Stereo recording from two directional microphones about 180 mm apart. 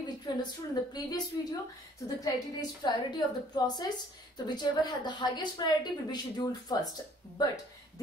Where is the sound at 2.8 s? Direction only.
25° left (ahead or behind).